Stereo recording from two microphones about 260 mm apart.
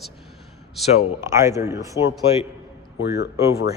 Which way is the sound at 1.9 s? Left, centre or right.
Left.